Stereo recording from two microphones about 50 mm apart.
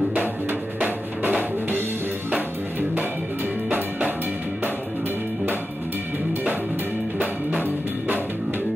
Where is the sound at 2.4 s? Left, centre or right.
Right.